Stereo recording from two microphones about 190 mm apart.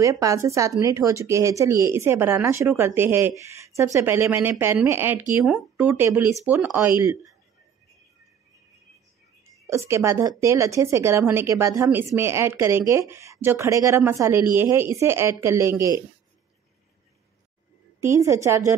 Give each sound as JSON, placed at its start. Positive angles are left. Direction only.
{"t": 0.0, "sound": "speech", "side_deg": -15}
{"t": 9.7, "sound": "speech", "side_deg": -15}
{"t": 18.0, "sound": "speech", "side_deg": -15}